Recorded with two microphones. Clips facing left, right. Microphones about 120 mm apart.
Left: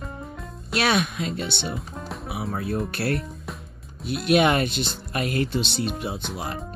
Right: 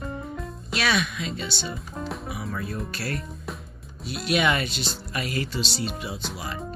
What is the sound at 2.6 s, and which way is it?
Speech, 60° left (ahead or behind).